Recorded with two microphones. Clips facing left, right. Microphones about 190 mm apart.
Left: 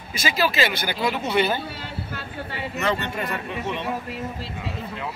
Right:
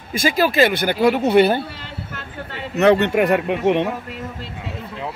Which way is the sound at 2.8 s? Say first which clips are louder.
Right 12 dB; 65° right (ahead or behind).